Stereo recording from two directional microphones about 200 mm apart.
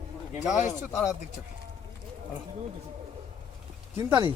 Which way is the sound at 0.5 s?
35° left (ahead or behind).